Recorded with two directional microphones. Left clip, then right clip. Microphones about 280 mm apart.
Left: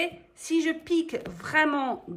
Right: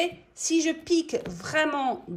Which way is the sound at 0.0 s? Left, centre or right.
Centre.